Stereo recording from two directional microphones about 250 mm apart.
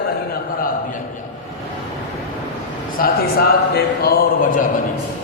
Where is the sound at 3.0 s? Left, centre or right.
Left.